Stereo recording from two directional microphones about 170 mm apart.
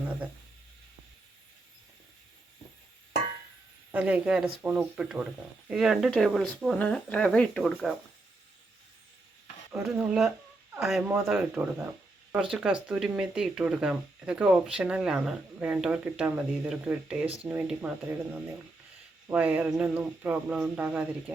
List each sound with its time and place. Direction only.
3.9 s speech: 10° right (ahead or behind)
9.7 s speech: centre (ahead or behind)